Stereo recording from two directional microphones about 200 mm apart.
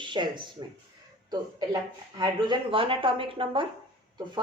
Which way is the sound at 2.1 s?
25° right (ahead or behind).